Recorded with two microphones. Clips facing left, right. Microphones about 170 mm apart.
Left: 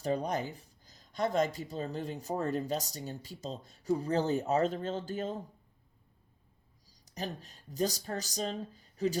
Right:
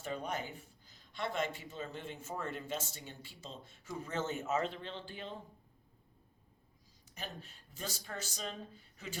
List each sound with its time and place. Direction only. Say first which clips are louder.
0.0 s speech: left 7 dB; 40° left (ahead or behind)
6.8 s speech: left 8 dB; 35° left (ahead or behind)